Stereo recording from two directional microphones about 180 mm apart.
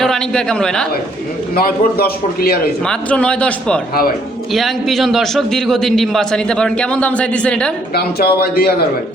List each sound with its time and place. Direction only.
0.0 s a man's voice: 5° left (ahead or behind)
1.5 s a man's voice: 55° left (ahead or behind)
2.8 s a man's voice: 5° left (ahead or behind)
7.9 s a man's voice: 60° left (ahead or behind)